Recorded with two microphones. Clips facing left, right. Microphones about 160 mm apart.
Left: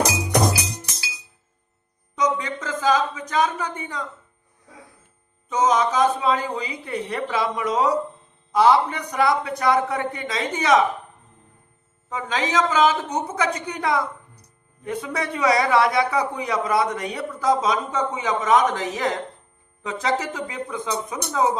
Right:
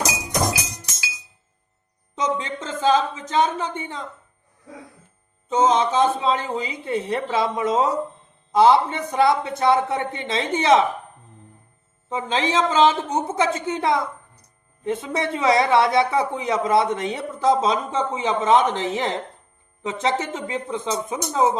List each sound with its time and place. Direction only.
2.1 s a man's voice: 25° right (ahead or behind)
5.5 s a man's voice: 25° right (ahead or behind)
12.0 s a man's voice: 25° right (ahead or behind)